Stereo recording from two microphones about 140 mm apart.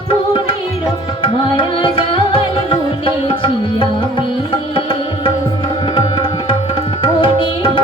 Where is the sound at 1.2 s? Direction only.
35° left (ahead or behind).